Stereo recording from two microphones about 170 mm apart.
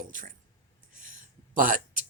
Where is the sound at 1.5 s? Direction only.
50° right (ahead or behind).